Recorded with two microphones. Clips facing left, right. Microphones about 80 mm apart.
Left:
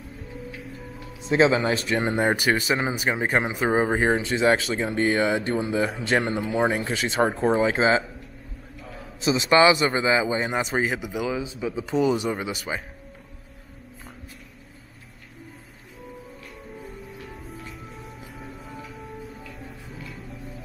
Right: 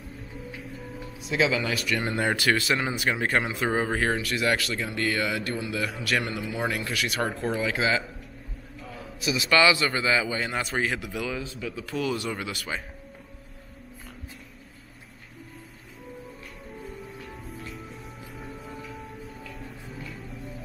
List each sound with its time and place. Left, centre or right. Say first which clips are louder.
0.6 s music: even; centre
1.2 s speech: left 6 dB; left
9.2 s speech: left 4 dB; left
16.8 s music: even; centre